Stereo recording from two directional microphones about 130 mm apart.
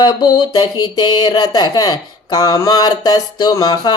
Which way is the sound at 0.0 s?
35° left (ahead or behind).